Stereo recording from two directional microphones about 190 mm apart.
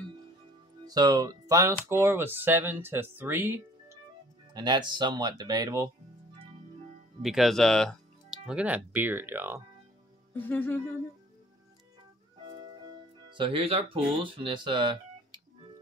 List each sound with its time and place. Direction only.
0.8 s speech: 20° right (ahead or behind)
4.6 s speech: 25° right (ahead or behind)
7.2 s speech: centre (ahead or behind)
10.3 s speech: 10° left (ahead or behind)
13.3 s speech: 25° right (ahead or behind)